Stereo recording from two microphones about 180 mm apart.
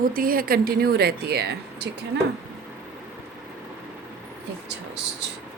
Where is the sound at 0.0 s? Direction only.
50° right (ahead or behind).